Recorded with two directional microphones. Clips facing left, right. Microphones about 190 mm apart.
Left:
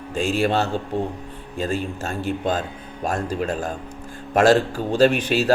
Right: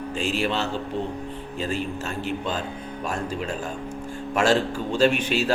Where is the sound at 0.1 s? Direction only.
50° left (ahead or behind).